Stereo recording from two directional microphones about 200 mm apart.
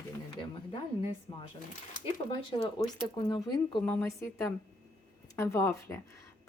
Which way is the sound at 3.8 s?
15° left (ahead or behind).